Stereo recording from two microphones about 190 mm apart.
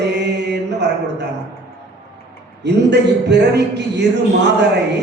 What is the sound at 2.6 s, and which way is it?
A man's voice, 65° right (ahead or behind).